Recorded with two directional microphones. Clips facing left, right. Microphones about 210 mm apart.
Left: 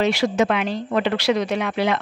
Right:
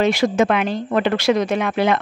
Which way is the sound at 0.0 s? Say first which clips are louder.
Right 2 dB; 50° right (ahead or behind).